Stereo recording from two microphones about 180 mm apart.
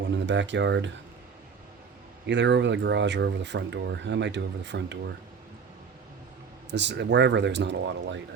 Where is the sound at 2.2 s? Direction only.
80° right.